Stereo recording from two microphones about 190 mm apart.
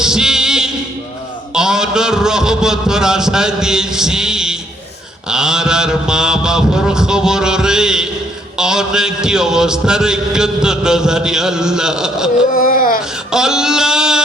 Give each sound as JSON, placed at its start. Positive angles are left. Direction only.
{"t": 0.0, "sound": "music", "side_deg": -5}
{"t": 1.5, "sound": "a man's voice", "side_deg": -5}
{"t": 12.5, "sound": "a sound", "side_deg": 45}
{"t": 13.3, "sound": "a man's voice", "side_deg": -5}